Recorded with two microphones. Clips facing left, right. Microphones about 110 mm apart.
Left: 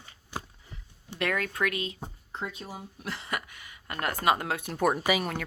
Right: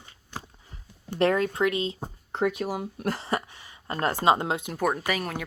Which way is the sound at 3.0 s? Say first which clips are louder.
Right 6 dB; 40° right (ahead or behind).